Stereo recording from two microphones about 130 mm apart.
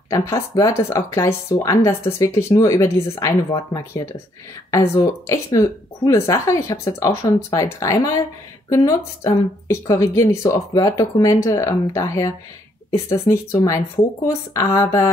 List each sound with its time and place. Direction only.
0.1 s speech: 25° left (ahead or behind)